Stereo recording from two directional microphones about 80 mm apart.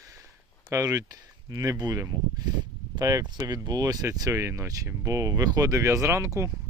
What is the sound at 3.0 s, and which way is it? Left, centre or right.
Speech, right.